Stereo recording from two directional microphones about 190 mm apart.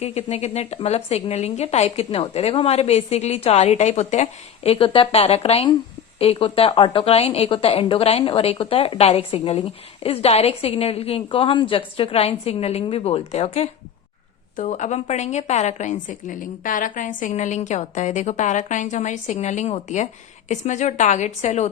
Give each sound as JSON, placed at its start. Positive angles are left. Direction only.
{"t": 0.0, "sound": "a woman's voice", "side_deg": 35}